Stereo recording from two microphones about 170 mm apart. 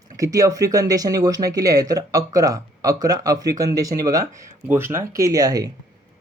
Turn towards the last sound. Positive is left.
turn(degrees=-20)  # may be behind; listen again after turning